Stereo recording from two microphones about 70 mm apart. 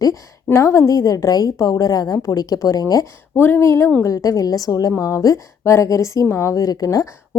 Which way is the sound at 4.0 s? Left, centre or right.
Left.